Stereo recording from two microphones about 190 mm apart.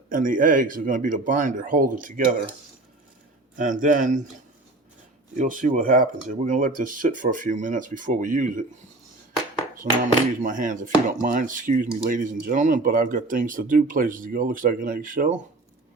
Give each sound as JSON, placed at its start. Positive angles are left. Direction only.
{"t": 0.1, "sound": "speech", "side_deg": -45}
{"t": 3.6, "sound": "speech", "side_deg": -45}
{"t": 5.4, "sound": "speech", "side_deg": -45}
{"t": 9.8, "sound": "speech", "side_deg": -45}